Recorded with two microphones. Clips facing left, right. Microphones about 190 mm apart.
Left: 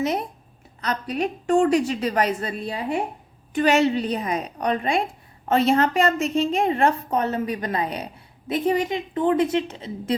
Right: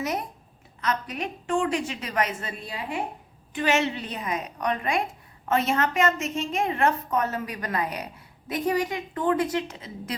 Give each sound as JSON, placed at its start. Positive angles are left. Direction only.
{"t": 0.0, "sound": "a woman's voice", "side_deg": 30}